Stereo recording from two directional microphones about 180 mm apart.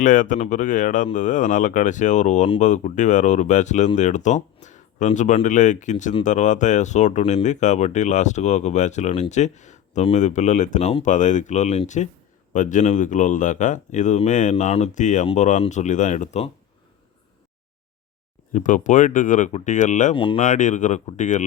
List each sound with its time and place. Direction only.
0.0 s speech: 45° left (ahead or behind)
18.5 s speech: 45° left (ahead or behind)
20.1 s speech: 30° left (ahead or behind)
20.4 s speech: 45° left (ahead or behind)